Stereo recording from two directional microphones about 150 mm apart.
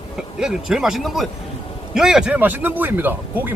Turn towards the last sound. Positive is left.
turn(degrees=-10)  # may be behind; listen again after turning